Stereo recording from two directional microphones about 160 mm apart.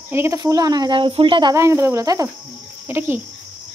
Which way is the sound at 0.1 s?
20° right (ahead or behind).